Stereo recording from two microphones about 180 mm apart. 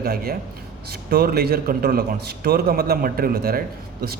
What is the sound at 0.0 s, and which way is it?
Speech, 55° right (ahead or behind).